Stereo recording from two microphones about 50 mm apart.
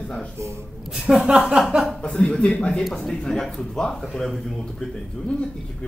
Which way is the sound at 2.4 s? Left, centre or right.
Left.